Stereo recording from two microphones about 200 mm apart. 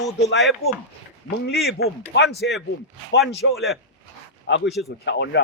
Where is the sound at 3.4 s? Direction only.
65° left (ahead or behind).